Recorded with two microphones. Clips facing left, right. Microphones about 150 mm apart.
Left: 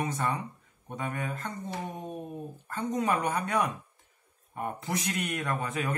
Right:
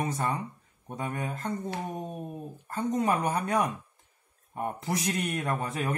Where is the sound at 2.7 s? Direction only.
35° right (ahead or behind).